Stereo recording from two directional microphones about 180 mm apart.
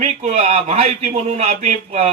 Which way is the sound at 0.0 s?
40° right (ahead or behind).